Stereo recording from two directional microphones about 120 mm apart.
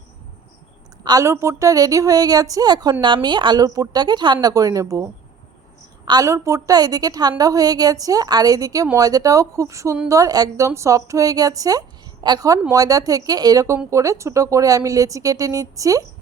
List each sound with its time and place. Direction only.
1.0 s a woman's voice: 30° right (ahead or behind)
6.1 s a woman's voice: 30° right (ahead or behind)